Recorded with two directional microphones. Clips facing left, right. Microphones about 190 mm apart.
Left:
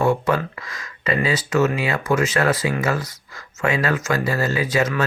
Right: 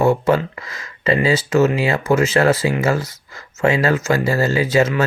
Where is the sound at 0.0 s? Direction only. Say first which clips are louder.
Right 4 dB; 25° right (ahead or behind).